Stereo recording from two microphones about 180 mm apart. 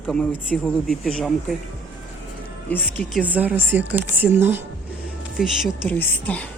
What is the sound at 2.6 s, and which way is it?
Speech, 10° left (ahead or behind).